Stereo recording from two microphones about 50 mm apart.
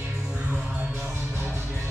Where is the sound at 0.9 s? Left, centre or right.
Right.